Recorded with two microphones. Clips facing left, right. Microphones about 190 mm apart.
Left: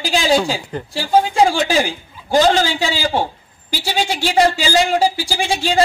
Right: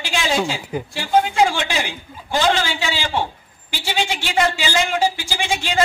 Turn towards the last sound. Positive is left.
turn(degrees=35)  # may be behind; listen again after turning